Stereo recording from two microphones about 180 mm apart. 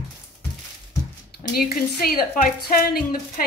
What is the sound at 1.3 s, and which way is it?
A woman's voice, 60° left (ahead or behind).